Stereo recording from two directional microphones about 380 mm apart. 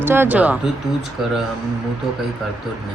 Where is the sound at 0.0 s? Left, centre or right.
Centre.